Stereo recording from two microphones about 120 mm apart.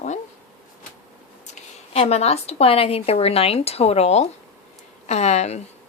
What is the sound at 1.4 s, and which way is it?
A woman's voice, 65° left (ahead or behind).